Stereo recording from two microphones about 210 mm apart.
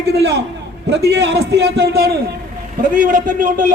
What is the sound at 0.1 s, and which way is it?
A man's voice, 50° right (ahead or behind).